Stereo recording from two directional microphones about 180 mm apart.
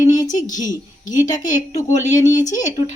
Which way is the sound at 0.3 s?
45° left (ahead or behind).